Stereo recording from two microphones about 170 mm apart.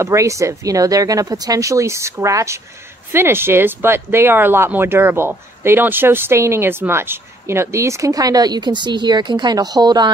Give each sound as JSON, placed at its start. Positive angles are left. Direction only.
{"t": 0.0, "sound": "speech", "side_deg": -15}